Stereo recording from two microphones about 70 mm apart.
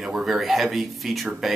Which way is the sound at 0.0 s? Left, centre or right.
Centre.